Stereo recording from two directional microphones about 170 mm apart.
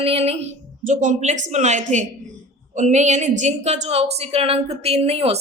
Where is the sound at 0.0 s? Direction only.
35° right (ahead or behind).